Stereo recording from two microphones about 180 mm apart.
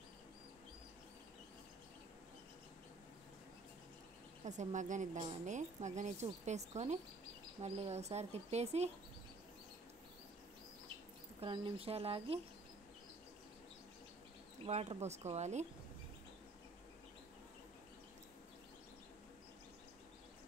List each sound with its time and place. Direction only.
4.5 s speech: 40° right (ahead or behind)
11.4 s speech: 30° right (ahead or behind)
14.7 s speech: 35° right (ahead or behind)